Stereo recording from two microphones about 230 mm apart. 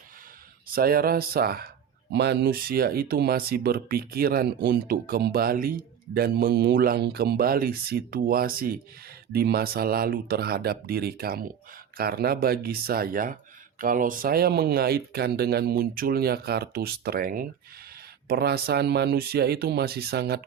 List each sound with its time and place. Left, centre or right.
0.7 s speech: right